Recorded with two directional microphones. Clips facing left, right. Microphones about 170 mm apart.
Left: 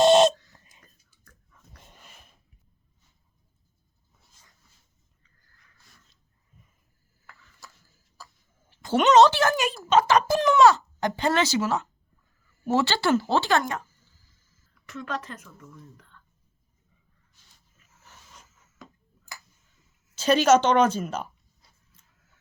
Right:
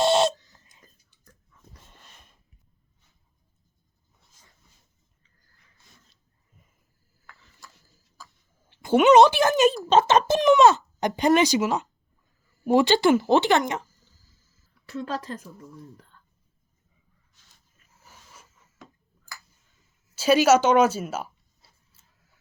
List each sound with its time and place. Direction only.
0.0 s a sound: 20° left (ahead or behind)
7.6 s tick-tock: centre (ahead or behind)
8.2 s cough: centre (ahead or behind)
8.8 s speech: 10° right (ahead or behind)
14.8 s speech: 30° right (ahead or behind)
16.0 s a sound: 35° right (ahead or behind)
18.0 s filing: 10° right (ahead or behind)
20.1 s speech: 10° right (ahead or behind)